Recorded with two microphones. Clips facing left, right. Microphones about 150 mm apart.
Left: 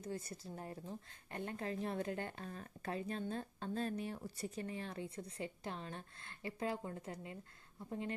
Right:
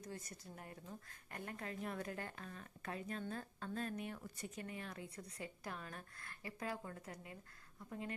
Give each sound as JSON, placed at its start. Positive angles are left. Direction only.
{"t": 0.0, "sound": "a woman's voice", "side_deg": 30}